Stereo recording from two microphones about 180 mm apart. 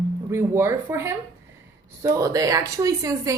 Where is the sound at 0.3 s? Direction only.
15° right (ahead or behind).